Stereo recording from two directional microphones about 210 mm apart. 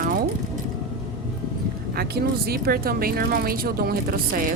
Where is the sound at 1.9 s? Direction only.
50° right (ahead or behind).